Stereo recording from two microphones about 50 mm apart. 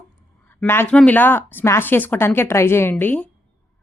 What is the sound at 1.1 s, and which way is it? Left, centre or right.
Speech, left.